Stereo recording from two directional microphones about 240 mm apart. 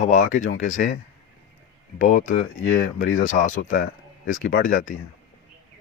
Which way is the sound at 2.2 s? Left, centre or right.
Left.